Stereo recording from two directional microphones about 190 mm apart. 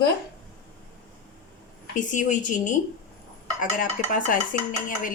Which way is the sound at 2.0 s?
40° left (ahead or behind).